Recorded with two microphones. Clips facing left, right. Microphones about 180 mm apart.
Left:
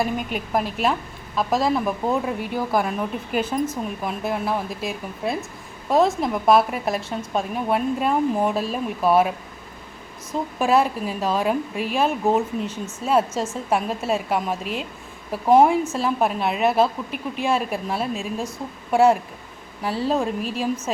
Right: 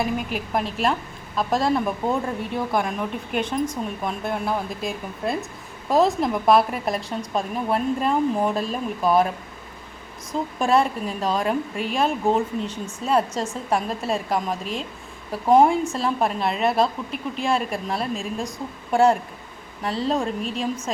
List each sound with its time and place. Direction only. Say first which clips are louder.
0.0 s speech: left 1 dB; centre (ahead or behind)
10.3 s speech: left 1 dB; 5° left (ahead or behind)
12.6 s speech: left 1 dB; 30° right (ahead or behind)
13.0 s speech: left 1 dB; 5° left (ahead or behind)